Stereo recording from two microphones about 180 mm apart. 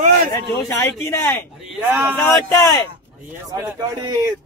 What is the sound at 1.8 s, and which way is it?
Speech, 10° right (ahead or behind).